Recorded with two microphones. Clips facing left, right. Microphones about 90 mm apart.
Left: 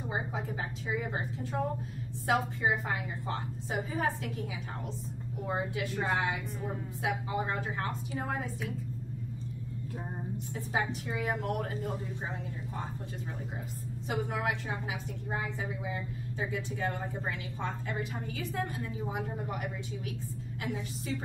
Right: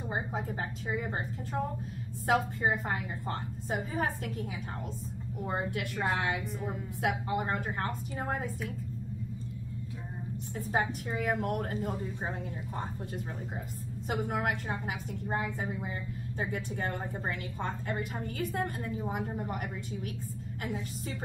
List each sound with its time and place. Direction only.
0.1 s a woman's voice: 45° right (ahead or behind)
2.2 s a woman's voice: 45° right (ahead or behind)
6.0 s a woman's voice: 65° right (ahead or behind); by 8.4 s 45° right (ahead or behind)
10.5 s a woman's voice: 45° right (ahead or behind)
14.0 s a woman's voice: 50° right (ahead or behind)